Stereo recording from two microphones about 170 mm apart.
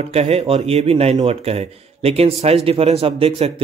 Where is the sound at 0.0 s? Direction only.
40° right (ahead or behind).